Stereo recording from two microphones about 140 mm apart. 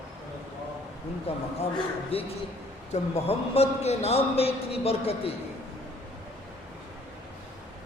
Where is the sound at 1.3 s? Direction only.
45° left (ahead or behind).